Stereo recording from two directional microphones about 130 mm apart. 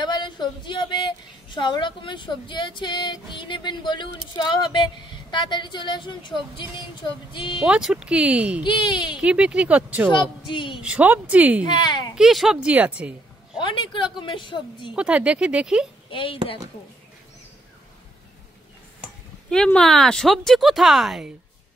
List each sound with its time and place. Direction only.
0.0 s a woman's voice: 35° left (ahead or behind)
7.6 s speech: 5° right (ahead or behind)
8.6 s a woman's voice: 35° left (ahead or behind)
9.1 s speech: 10° right (ahead or behind)
10.5 s a woman's voice: 40° left (ahead or behind)
10.8 s speech: 10° right (ahead or behind)
11.6 s a woman's voice: 35° left (ahead or behind)
12.2 s speech: centre (ahead or behind)
13.6 s a woman's voice: 40° left (ahead or behind)
15.0 s speech: 10° right (ahead or behind)
16.1 s speech: 40° left (ahead or behind)
19.5 s speech: 5° left (ahead or behind)